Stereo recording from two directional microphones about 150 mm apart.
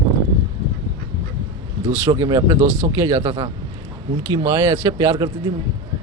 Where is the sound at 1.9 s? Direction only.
20° right (ahead or behind).